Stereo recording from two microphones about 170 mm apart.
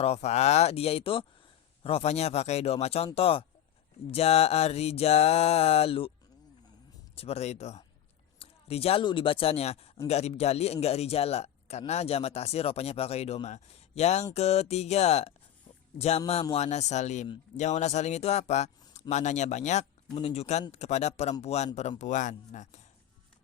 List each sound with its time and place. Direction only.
0.0 s a man's voice: 40° left (ahead or behind)
7.2 s a man's voice: 40° left (ahead or behind)